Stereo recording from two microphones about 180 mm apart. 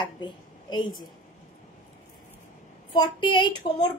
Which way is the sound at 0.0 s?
25° left (ahead or behind).